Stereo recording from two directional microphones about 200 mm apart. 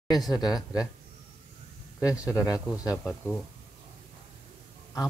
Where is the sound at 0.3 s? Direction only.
20° left (ahead or behind).